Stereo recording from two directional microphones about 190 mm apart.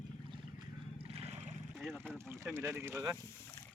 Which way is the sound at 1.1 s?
35° right (ahead or behind).